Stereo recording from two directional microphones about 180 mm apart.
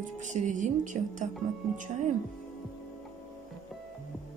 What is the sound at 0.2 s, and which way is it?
Speech, 45° right (ahead or behind).